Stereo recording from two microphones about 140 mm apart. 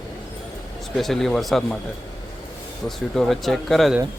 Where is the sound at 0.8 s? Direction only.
Centre (ahead or behind).